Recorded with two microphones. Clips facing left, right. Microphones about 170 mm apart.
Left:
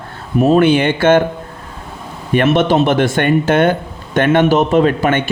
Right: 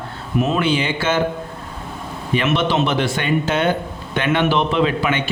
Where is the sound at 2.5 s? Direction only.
50° left (ahead or behind).